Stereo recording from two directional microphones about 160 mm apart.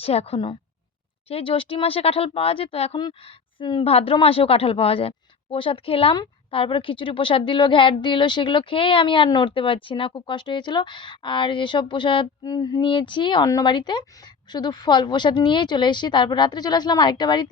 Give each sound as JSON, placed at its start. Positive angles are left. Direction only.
{"t": 0.0, "sound": "a woman's voice", "side_deg": 40}